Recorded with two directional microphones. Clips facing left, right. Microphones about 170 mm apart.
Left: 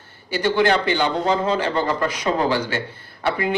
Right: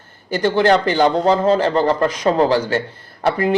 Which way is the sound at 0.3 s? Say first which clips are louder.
Right 4 dB; 45° right (ahead or behind).